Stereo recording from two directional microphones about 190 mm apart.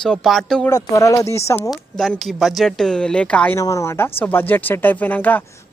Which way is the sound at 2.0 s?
Centre (ahead or behind).